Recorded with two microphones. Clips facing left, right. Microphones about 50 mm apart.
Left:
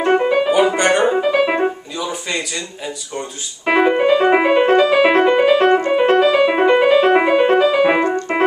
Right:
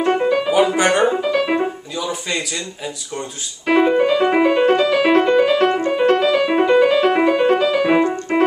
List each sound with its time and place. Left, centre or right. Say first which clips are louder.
0.2 s music: left 2 dB; centre
0.7 s music: left 1 dB; centre
1.0 s music: left 2 dB; centre
2.0 s a sound: even; centre
3.6 s keyboard: left 1 dB; left
4.0 s music: left 2 dB; left